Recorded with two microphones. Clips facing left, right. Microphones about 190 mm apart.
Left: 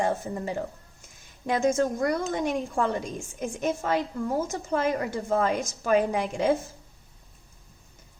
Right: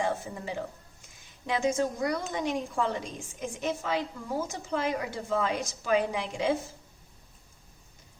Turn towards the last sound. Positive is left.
turn(degrees=45)  # may be behind; listen again after turning